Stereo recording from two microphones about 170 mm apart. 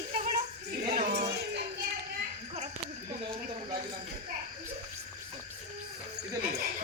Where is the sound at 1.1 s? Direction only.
90° right.